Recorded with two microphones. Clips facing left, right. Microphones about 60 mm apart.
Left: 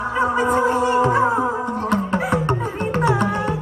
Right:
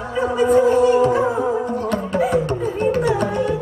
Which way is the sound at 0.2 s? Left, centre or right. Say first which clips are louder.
Right 3 dB; left.